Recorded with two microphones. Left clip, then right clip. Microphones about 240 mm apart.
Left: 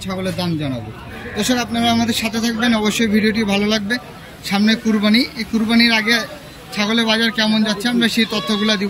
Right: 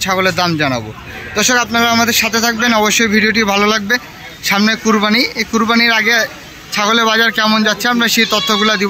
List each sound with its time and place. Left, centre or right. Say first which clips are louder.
0.2 s a man's voice: right 10 dB; right
1.3 s speech: right 7 dB; centre